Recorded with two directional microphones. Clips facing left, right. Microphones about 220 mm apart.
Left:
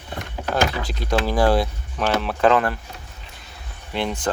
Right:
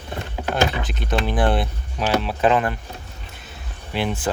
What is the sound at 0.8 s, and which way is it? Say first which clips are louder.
Speech: left 1 dB; 20° right (ahead or behind).